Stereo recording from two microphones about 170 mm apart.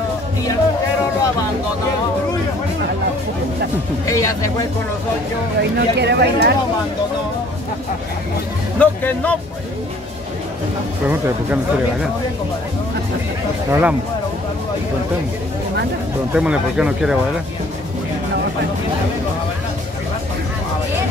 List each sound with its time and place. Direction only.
4.0 s speech: 20° left (ahead or behind)
5.6 s speech: 80° right
8.7 s speech: 10° left (ahead or behind)
11.1 s speech: 10° right (ahead or behind)
13.7 s speech: 10° right (ahead or behind)
16.3 s speech: 5° right (ahead or behind)